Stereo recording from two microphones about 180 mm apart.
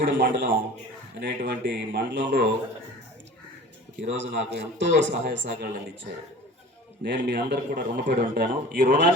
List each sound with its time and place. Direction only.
0.0 s a man's voice: 75° right (ahead or behind)
4.0 s a man's voice: 75° right (ahead or behind)
7.0 s a man's voice: 70° right (ahead or behind)